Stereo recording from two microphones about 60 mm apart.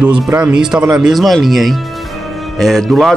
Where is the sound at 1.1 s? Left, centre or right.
Centre.